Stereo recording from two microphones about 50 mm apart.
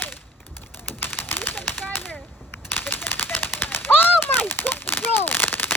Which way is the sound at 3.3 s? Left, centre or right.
Left.